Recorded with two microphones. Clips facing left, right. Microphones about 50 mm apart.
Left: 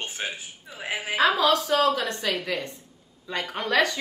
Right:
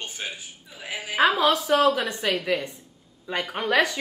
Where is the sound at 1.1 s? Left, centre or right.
Centre.